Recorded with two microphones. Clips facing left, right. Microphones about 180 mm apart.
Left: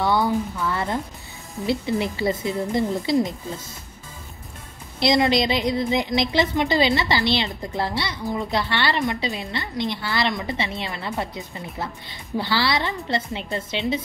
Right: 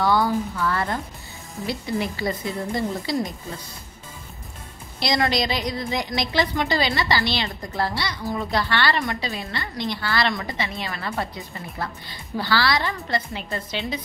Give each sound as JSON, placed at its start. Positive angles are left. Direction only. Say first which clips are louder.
{"t": 0.0, "sound": "a woman's voice", "louder": "even", "side_deg": 25}
{"t": 5.0, "sound": "a woman's voice", "louder": "left 4 dB", "side_deg": 25}